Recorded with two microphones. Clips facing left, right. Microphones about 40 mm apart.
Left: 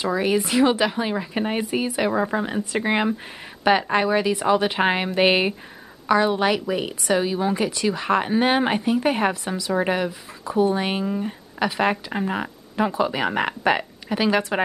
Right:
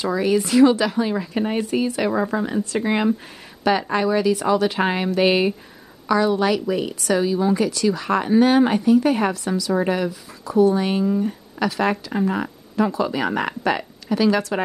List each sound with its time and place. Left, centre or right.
0.0 s a woman's voice: left